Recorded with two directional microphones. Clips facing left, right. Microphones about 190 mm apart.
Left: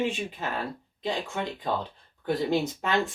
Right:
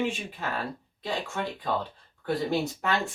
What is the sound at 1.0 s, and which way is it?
Speech, 20° left (ahead or behind).